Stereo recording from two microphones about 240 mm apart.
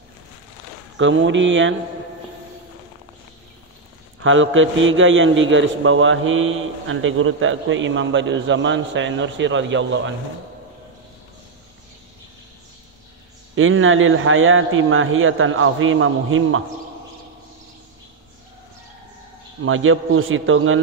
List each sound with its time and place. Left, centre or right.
0.9 s a man's voice: right
4.2 s a man's voice: right
13.6 s a man's voice: right
19.6 s a man's voice: right